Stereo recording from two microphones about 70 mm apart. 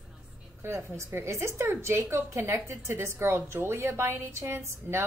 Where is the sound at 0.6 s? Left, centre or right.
Right.